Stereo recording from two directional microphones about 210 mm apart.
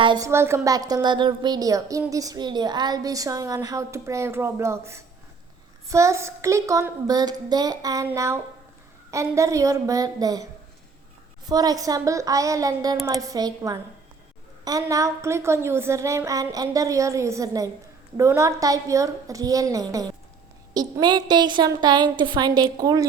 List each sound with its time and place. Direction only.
0.0 s a woman's voice: 20° right (ahead or behind)